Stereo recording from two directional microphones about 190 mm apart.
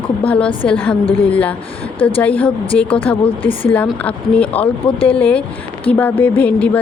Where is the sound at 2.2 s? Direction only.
10° left (ahead or behind).